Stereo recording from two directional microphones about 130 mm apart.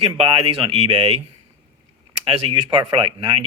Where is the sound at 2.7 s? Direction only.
40° right (ahead or behind).